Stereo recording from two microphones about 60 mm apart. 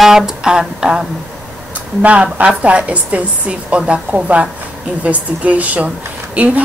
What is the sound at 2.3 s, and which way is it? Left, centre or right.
A woman's voice, right.